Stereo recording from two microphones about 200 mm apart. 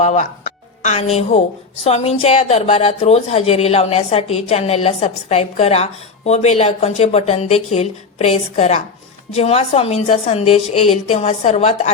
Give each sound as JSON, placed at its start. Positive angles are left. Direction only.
{"t": 0.0, "sound": "a woman's voice", "side_deg": 35}